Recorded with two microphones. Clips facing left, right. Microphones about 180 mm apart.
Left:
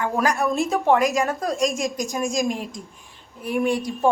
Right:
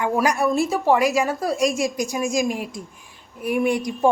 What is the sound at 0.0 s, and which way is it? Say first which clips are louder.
Speech: right 2 dB; 15° right (ahead or behind).